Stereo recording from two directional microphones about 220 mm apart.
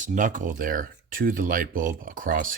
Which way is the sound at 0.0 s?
35° right (ahead or behind).